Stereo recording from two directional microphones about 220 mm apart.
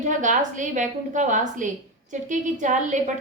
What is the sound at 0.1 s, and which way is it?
A woman's voice, 35° right (ahead or behind).